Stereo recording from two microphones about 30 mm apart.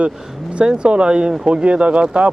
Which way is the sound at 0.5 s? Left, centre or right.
Right.